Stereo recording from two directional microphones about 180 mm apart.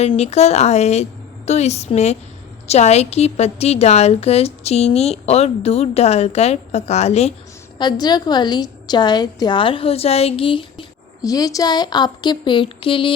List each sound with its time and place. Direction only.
0.0 s a woman's voice: 35° left (ahead or behind)
7.8 s a woman's voice: 25° left (ahead or behind)